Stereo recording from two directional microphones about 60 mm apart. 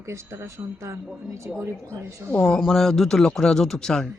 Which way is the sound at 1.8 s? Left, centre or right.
Left.